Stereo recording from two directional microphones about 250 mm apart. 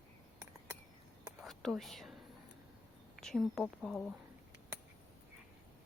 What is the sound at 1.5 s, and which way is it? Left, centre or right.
Whispering, centre.